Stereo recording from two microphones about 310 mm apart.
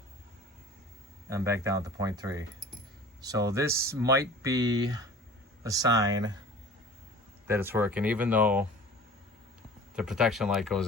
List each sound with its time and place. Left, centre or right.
1.3 s speech: centre
7.4 s speech: centre
9.9 s speech: centre